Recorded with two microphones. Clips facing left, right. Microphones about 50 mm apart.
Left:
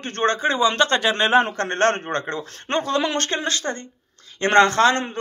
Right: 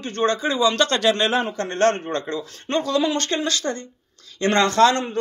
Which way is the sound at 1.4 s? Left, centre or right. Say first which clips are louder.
Left 2 dB; left.